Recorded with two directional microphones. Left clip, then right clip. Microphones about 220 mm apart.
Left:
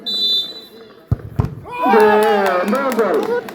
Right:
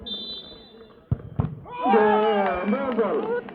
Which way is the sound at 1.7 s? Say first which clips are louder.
Left 7 dB; 60° left (ahead or behind).